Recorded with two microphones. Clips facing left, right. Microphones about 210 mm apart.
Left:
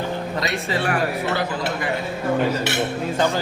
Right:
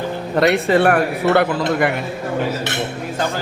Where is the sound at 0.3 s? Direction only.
65° right (ahead or behind).